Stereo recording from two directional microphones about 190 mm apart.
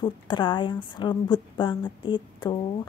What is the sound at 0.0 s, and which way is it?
Speech, 25° left (ahead or behind).